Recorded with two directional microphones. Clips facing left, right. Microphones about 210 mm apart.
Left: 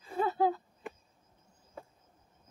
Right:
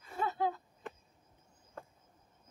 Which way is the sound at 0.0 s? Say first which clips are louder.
Left 5 dB; 35° left (ahead or behind).